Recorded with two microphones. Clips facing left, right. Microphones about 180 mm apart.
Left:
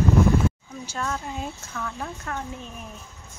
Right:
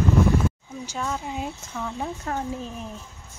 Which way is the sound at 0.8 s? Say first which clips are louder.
Right 1 dB; 15° right (ahead or behind).